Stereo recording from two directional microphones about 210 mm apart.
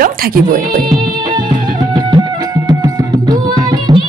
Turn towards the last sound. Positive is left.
turn(degrees=-20)  # may be behind; listen again after turning